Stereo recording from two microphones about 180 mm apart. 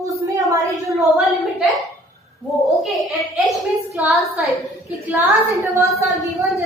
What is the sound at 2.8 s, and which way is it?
A woman's voice, centre (ahead or behind).